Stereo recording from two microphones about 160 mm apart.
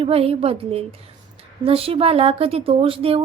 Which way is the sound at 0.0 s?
35° right (ahead or behind).